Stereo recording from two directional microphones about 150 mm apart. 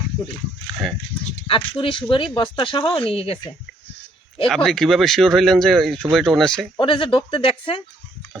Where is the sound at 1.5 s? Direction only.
35° left (ahead or behind).